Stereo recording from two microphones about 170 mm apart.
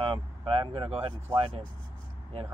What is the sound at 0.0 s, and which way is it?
Speech, 30° right (ahead or behind).